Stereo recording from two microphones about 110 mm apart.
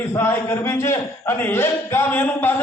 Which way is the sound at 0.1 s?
20° left (ahead or behind).